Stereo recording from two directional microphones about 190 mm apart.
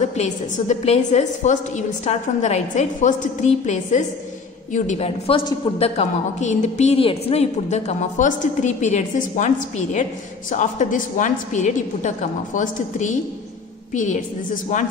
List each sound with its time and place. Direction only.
0.0 s a woman's voice: 35° left (ahead or behind)